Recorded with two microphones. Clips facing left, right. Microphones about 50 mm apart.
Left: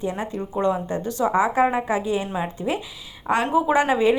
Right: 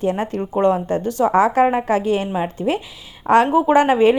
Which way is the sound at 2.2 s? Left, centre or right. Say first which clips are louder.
Right 5 dB; right.